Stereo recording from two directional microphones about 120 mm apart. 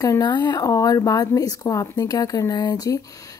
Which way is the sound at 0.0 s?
30° left (ahead or behind).